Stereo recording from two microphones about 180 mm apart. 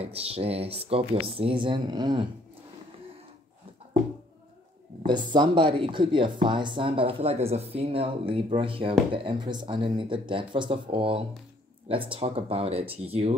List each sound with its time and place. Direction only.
0.0 s speech: 35° right (ahead or behind)
5.0 s speech: 25° right (ahead or behind)